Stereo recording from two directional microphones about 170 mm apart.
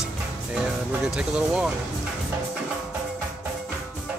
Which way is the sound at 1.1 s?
5° right (ahead or behind).